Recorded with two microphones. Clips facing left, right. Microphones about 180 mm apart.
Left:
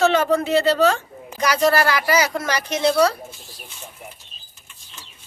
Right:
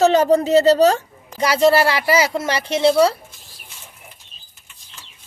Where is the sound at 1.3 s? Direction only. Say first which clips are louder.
Right 3 dB; 25° right (ahead or behind).